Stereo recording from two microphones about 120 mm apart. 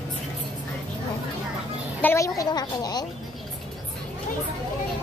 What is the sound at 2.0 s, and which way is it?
A woman's voice, 25° left (ahead or behind).